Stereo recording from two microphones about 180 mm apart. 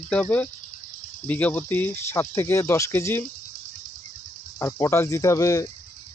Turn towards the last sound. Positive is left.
turn(degrees=20)  # may be behind; listen again after turning